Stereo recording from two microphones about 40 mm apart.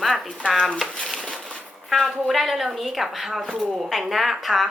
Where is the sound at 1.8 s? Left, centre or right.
Centre.